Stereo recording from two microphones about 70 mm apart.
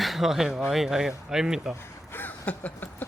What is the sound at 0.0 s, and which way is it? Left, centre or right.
Speech, centre.